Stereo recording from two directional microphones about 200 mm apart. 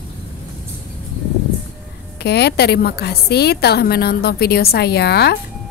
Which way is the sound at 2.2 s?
55° left (ahead or behind).